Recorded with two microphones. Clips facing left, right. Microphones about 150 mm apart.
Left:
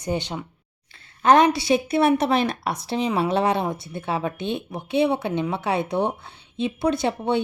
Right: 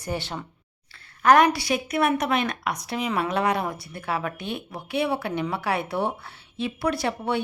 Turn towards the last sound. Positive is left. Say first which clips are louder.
# left 3 dB
turn(degrees=20)  # may be behind; listen again after turning